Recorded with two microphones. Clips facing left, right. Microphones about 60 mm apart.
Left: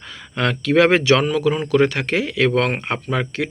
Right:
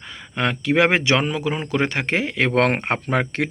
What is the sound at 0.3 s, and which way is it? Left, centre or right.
Speech, centre.